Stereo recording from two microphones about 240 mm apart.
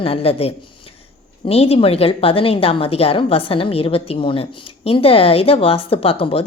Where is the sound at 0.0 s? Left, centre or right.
Left.